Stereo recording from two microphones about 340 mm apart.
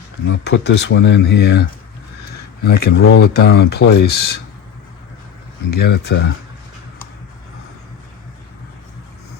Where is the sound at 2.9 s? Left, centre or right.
Left.